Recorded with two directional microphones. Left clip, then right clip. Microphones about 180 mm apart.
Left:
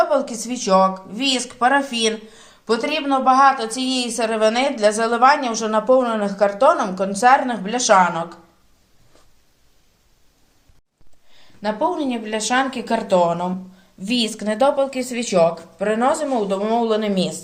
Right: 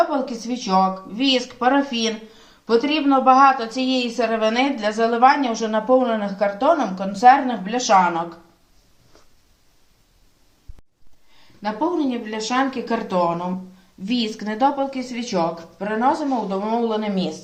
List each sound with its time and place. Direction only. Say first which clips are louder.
0.1 s speech: left 4 dB; 55° left (ahead or behind)
11.6 s speech: left 1 dB; 50° left (ahead or behind)